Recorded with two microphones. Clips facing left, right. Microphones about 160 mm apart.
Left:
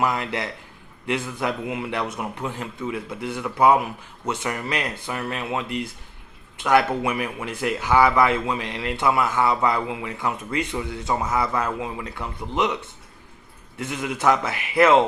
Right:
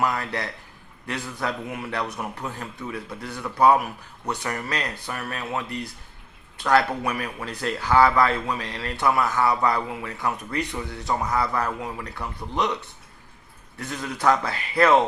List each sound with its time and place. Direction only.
0.0 s a man's voice: 20° left (ahead or behind)
13.7 s a man's voice: 20° left (ahead or behind)